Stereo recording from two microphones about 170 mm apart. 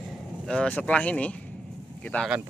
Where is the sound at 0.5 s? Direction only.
5° left (ahead or behind).